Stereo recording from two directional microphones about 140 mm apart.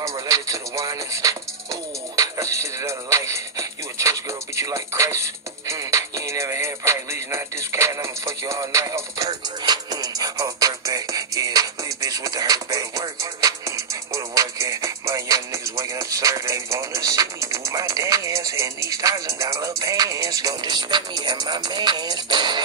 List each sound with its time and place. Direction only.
0.0 s music: 25° right (ahead or behind)